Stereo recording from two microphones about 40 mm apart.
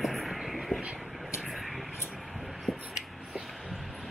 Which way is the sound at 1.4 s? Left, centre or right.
Centre.